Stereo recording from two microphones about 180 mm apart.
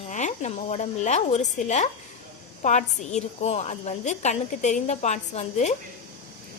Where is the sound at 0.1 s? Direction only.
40° left (ahead or behind).